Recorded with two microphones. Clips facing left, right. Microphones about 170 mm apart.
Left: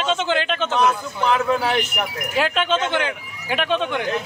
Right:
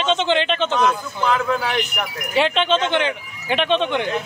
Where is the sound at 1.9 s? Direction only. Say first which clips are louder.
Right 2 dB; 5° left (ahead or behind).